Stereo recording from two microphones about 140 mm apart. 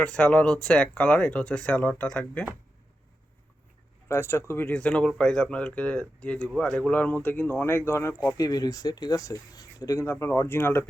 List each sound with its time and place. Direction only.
0.0 s speech: 10° left (ahead or behind)
4.1 s speech: 20° left (ahead or behind)